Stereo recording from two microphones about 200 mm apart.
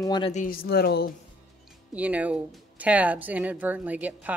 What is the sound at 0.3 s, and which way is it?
Speech, 45° left (ahead or behind).